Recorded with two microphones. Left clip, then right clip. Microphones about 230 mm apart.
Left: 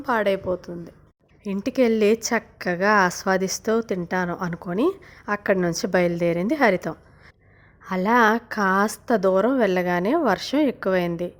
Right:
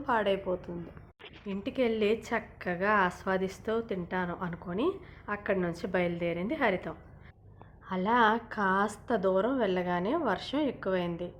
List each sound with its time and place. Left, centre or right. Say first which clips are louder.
0.0 s a woman's voice: left 7 dB; left